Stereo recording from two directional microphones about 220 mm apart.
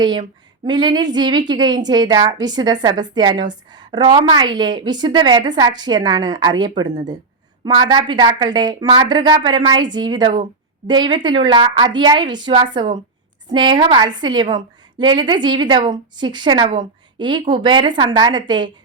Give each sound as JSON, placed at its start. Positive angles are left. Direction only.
{"t": 0.0, "sound": "speech", "side_deg": -20}